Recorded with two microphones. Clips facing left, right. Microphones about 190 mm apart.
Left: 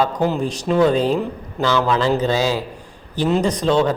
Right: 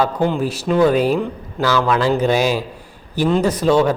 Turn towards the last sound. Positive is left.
turn(degrees=-10)  # may be behind; listen again after turning